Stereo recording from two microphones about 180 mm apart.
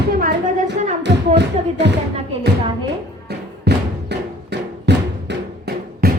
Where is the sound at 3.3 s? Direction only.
70° right (ahead or behind).